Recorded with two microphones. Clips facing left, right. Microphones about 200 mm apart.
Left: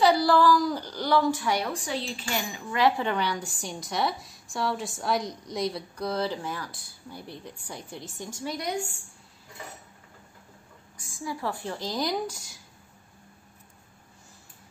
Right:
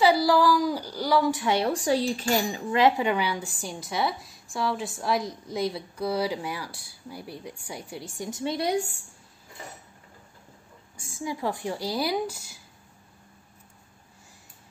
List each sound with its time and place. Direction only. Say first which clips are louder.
0.0 s speech: even; 10° right (ahead or behind)
1.4 s speech: right 4 dB; 30° right (ahead or behind)
2.8 s a woman's voice: right 2 dB; 10° right (ahead or behind)
11.0 s a woman's voice: right 3 dB; 25° right (ahead or behind); by 12.5 s 5° right (ahead or behind)